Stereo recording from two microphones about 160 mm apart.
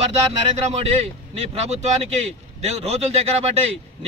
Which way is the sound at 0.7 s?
40° right (ahead or behind).